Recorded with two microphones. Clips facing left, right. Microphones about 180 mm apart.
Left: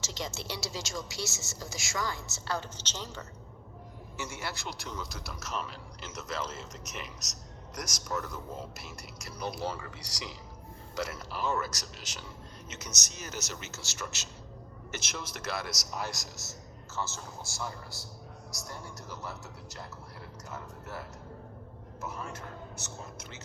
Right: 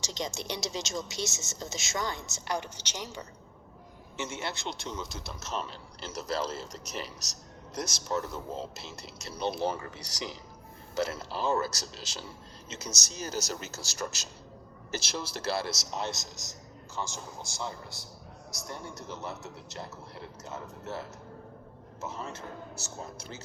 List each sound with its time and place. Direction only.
0.0 s speech: 15° right (ahead or behind)
10.9 s a man's voice: 25° right (ahead or behind)
18.7 s a man's voice: 20° right (ahead or behind)